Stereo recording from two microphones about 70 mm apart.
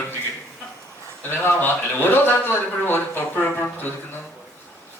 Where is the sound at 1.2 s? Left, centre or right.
Left.